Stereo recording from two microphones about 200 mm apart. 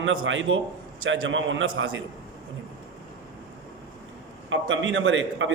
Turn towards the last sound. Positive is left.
turn(degrees=-70)  # may be behind; listen again after turning